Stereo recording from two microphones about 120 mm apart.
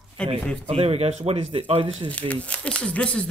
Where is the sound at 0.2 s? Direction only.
5° left (ahead or behind).